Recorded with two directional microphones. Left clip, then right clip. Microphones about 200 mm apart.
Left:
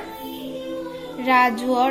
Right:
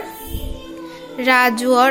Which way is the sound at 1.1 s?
25° right (ahead or behind).